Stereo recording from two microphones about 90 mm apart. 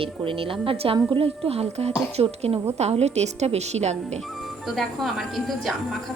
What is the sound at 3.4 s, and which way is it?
Speech, 90° right.